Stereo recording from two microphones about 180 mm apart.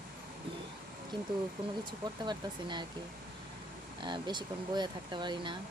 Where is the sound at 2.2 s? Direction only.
25° right (ahead or behind).